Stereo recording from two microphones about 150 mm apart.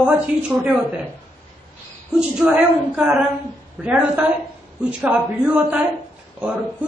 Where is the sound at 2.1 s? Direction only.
5° right (ahead or behind).